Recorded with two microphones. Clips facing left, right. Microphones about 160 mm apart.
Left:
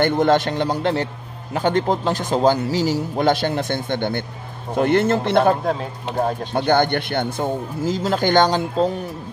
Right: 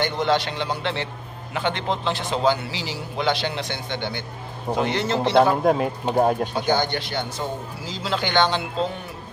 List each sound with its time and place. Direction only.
0.0 s a man's voice: 50° left (ahead or behind)
5.7 s speech: 15° right (ahead or behind)
6.5 s a man's voice: 55° left (ahead or behind); by 8.9 s 40° left (ahead or behind)